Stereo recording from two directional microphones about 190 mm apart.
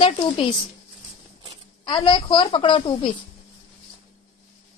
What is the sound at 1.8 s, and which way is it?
Speech, 25° left (ahead or behind).